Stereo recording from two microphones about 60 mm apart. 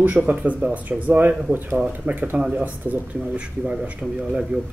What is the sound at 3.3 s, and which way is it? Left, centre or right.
A man's voice, centre.